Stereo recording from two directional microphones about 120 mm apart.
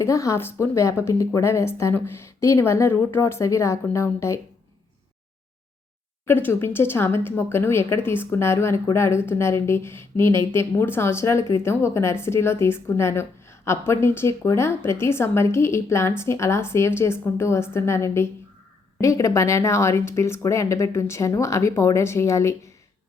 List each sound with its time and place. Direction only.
0.0 s a woman's voice: 25° left (ahead or behind)
6.2 s a woman's voice: 20° left (ahead or behind)